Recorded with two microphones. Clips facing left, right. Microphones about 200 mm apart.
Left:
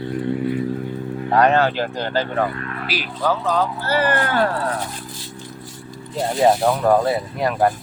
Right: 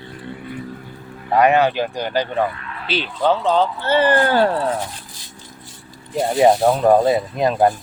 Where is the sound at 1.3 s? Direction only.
10° right (ahead or behind).